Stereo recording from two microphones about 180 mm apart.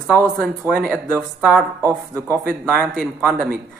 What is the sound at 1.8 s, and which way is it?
Speech, 15° right (ahead or behind).